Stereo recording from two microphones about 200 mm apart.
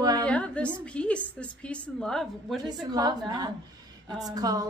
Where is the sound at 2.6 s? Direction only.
20° right (ahead or behind).